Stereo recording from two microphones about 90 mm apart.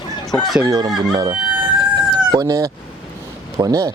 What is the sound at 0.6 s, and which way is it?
Speech, 45° right (ahead or behind).